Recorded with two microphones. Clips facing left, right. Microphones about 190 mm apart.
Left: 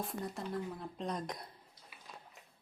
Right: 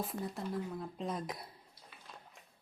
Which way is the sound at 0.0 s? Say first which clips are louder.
Right 1 dB; centre (ahead or behind).